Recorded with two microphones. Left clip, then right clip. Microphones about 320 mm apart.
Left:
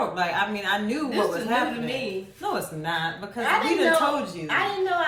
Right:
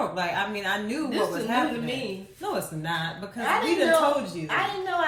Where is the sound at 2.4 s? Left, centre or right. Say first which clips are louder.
Left 1 dB; centre.